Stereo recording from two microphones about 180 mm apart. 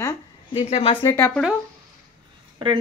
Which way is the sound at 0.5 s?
35° left (ahead or behind).